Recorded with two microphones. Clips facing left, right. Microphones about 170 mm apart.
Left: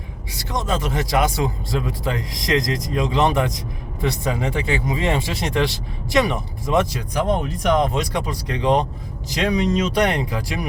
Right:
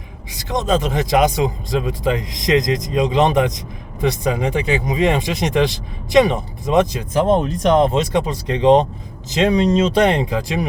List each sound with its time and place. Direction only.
0.3 s speech: 20° right (ahead or behind)